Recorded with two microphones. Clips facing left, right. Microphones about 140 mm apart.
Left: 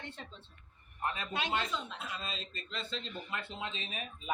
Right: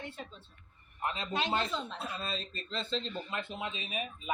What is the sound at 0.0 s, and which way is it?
Speech, 5° right (ahead or behind).